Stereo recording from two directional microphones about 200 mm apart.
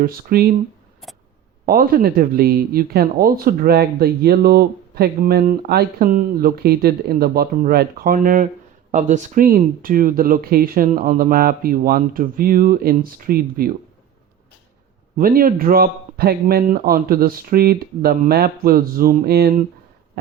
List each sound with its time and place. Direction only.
0.0 s speech: 45° right (ahead or behind)
1.6 s speech: 45° right (ahead or behind)
15.2 s speech: 45° right (ahead or behind)